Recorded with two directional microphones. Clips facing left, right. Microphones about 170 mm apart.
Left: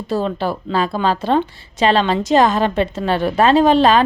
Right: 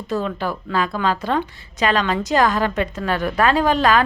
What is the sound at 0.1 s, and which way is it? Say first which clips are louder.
A woman's voice: left 3 dB; 30° left (ahead or behind).